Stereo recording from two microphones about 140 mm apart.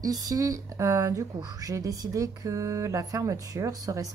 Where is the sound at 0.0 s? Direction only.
25° right (ahead or behind).